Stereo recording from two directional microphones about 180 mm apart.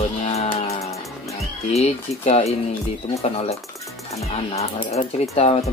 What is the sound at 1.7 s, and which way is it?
Speech, 35° left (ahead or behind).